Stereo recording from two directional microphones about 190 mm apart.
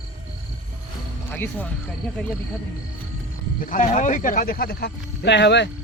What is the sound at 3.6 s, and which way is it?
Speech, 45° left (ahead or behind).